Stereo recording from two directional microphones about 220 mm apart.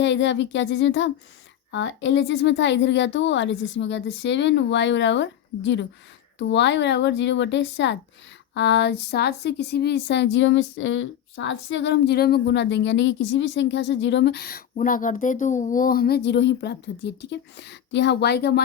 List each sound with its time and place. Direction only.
0.0 s a woman's voice: 55° left (ahead or behind)